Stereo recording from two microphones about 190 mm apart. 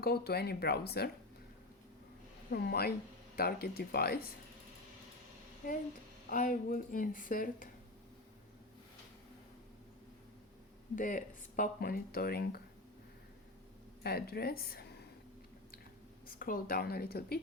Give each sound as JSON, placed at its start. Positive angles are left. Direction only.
{"t": 0.0, "sound": "speech", "side_deg": 55}
{"t": 2.5, "sound": "speech", "side_deg": 55}
{"t": 6.3, "sound": "speech", "side_deg": 45}
{"t": 10.9, "sound": "speech", "side_deg": 45}
{"t": 14.0, "sound": "speech", "side_deg": 55}
{"t": 16.4, "sound": "speech", "side_deg": 50}